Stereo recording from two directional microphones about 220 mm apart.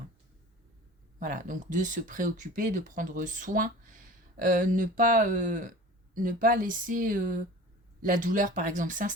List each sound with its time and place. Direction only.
1.2 s speech: 40° right (ahead or behind)